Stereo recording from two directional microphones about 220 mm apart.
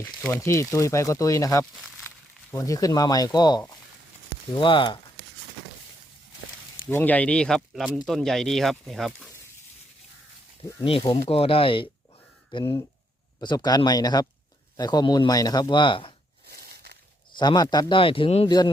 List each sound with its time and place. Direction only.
0.2 s speech: 10° left (ahead or behind)
6.8 s speech: 5° left (ahead or behind)
10.8 s speech: 25° left (ahead or behind)
16.5 s a sound: 45° right (ahead or behind)
17.3 s speech: 20° left (ahead or behind)